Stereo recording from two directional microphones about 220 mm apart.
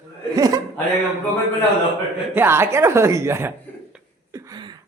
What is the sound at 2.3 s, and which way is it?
A woman's voice, 10° right (ahead or behind).